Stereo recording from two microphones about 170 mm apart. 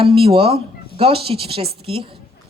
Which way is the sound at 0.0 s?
30° right (ahead or behind).